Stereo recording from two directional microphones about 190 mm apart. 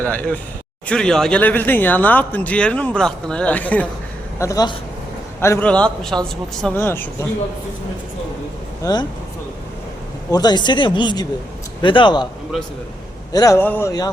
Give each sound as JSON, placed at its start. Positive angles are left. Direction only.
{"t": 0.0, "sound": "a man's voice", "side_deg": 10}
{"t": 8.8, "sound": "speech", "side_deg": 20}
{"t": 10.3, "sound": "speech", "side_deg": 20}
{"t": 13.3, "sound": "speech", "side_deg": 15}